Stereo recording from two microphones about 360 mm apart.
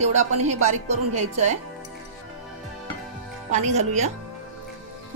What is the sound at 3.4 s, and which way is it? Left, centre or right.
Speech, centre.